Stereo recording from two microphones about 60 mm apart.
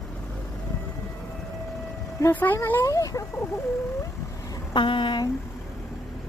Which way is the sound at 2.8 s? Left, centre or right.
Left.